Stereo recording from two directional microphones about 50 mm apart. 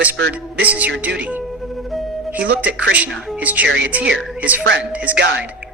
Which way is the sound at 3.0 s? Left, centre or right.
Right.